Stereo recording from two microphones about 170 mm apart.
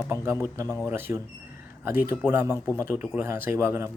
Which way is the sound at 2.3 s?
15° right (ahead or behind).